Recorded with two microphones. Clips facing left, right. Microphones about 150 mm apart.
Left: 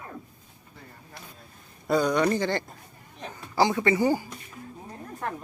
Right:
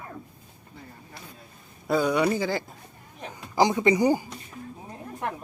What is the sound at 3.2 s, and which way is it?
Speech, 20° right (ahead or behind).